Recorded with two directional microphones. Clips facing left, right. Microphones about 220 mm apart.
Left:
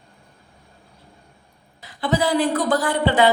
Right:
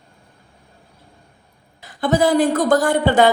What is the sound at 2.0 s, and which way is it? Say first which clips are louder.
Speech: right 4 dB; 45° right (ahead or behind).